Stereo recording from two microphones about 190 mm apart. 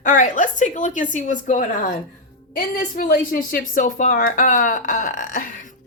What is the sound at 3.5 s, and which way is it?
Speech, 45° left (ahead or behind).